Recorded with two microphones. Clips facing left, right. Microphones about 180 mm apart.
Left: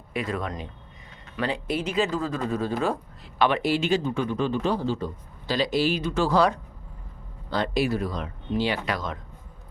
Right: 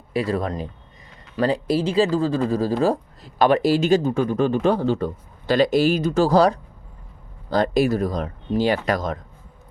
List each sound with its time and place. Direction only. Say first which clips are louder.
0.1 s speech: right 6 dB; 35° right (ahead or behind)